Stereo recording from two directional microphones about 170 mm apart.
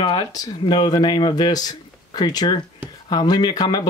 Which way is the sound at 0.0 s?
25° left (ahead or behind).